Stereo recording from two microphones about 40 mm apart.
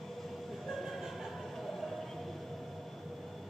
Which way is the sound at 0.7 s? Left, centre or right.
Centre.